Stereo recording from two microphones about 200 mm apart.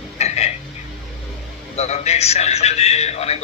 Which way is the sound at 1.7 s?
35° left (ahead or behind).